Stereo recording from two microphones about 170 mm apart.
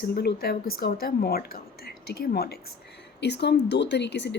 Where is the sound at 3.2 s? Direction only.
85° left.